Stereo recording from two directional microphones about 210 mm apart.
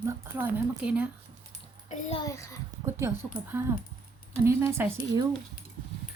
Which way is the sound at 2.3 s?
15° left (ahead or behind).